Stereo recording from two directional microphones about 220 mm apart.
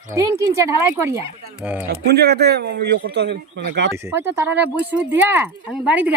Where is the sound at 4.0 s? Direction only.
10° right (ahead or behind).